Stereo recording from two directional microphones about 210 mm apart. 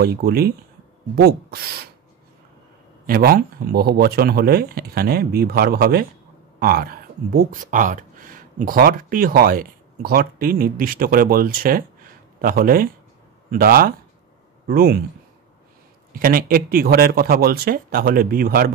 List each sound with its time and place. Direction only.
0.0 s speech: 45° right (ahead or behind)
3.1 s speech: 45° right (ahead or behind)
16.1 s speech: 45° right (ahead or behind)